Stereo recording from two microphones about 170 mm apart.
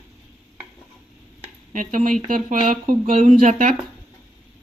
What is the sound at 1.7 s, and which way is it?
Speech, 50° right (ahead or behind).